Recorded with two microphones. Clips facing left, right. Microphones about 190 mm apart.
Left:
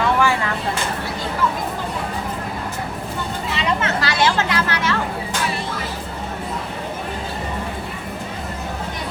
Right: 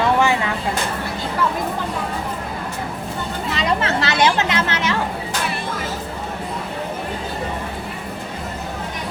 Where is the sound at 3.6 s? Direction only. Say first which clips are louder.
Right 2 dB; 25° right (ahead or behind).